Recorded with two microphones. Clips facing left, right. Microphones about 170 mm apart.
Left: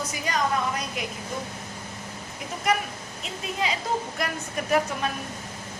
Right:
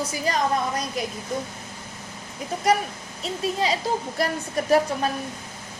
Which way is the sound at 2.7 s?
35° right (ahead or behind).